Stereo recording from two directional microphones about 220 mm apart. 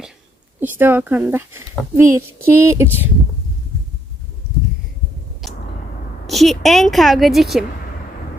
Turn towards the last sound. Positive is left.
turn(degrees=0)  # may be behind; listen again after turning